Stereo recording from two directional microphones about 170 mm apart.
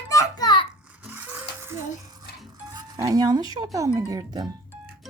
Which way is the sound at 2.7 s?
25° right (ahead or behind).